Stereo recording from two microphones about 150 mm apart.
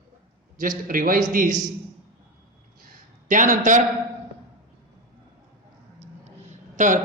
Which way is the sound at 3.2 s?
60° right (ahead or behind).